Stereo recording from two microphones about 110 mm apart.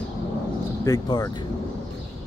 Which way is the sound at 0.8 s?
35° left (ahead or behind).